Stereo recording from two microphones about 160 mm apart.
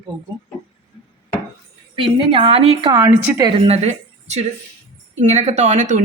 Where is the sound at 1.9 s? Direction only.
35° right (ahead or behind).